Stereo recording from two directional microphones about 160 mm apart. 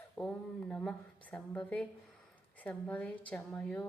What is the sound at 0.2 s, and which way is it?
A woman's voice, 10° left (ahead or behind).